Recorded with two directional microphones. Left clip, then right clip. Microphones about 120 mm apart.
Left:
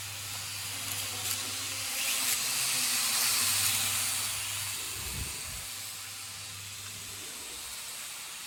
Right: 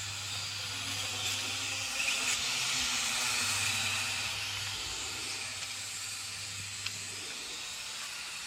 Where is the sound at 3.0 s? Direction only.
25° left (ahead or behind).